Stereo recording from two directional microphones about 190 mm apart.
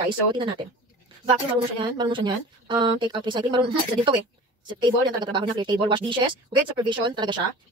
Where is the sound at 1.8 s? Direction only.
25° right (ahead or behind).